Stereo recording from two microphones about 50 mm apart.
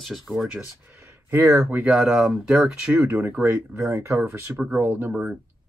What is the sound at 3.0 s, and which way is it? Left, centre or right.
Speech, right.